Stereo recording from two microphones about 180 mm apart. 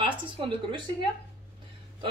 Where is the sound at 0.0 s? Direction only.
25° right (ahead or behind).